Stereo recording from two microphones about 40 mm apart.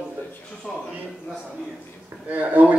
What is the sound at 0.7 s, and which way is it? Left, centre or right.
Speech, centre.